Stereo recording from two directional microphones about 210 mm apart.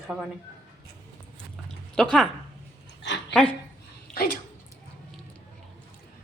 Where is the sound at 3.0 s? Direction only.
55° left (ahead or behind).